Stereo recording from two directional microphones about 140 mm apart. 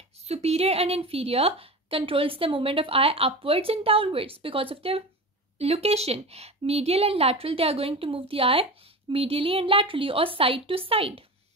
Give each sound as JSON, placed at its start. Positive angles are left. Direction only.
{"t": 0.3, "sound": "a woman's voice", "side_deg": -50}